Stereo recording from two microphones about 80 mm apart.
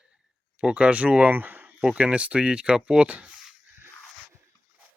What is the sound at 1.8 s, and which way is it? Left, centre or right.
Speech, centre.